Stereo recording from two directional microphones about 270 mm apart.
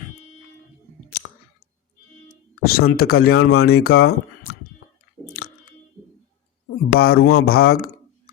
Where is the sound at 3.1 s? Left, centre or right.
Left.